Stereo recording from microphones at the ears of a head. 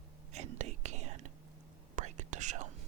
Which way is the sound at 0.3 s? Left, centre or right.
Right.